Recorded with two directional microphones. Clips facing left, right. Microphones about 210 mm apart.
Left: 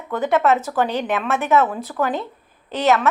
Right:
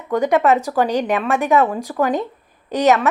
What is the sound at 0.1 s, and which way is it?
A woman's voice, 15° right (ahead or behind).